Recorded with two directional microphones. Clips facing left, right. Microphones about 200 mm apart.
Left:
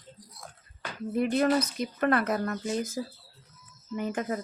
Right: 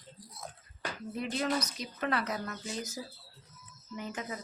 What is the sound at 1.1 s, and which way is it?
Speech, 55° left (ahead or behind).